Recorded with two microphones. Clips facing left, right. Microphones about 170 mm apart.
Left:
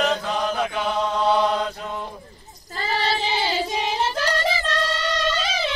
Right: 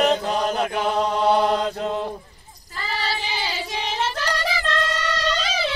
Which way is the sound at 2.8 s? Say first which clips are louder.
Left 4 dB; 25° left (ahead or behind).